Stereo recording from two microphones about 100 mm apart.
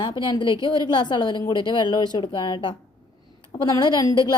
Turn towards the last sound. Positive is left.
turn(degrees=40)  # may be behind; listen again after turning